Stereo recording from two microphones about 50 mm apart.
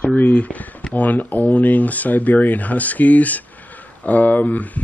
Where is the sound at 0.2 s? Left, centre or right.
Left.